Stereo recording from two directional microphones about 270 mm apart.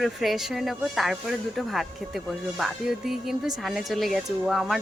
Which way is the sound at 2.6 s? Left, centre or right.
Centre.